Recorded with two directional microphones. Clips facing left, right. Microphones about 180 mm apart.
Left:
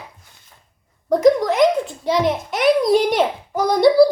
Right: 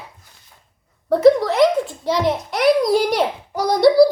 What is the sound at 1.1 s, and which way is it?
A child's voice, 15° left (ahead or behind).